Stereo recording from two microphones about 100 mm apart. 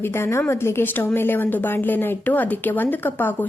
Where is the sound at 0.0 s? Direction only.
25° left (ahead or behind).